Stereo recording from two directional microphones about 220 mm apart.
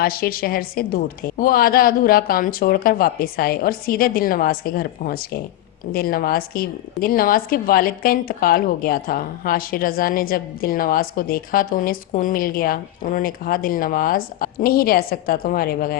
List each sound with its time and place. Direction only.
0.0 s a woman's voice: 40° left (ahead or behind)